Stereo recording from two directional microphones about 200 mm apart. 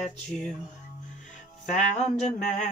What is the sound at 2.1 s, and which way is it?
Music, 35° left (ahead or behind).